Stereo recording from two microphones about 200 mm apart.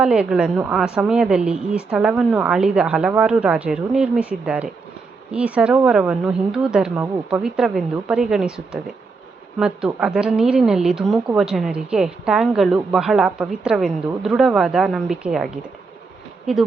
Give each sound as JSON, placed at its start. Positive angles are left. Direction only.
{"t": 0.0, "sound": "a woman's voice", "side_deg": -5}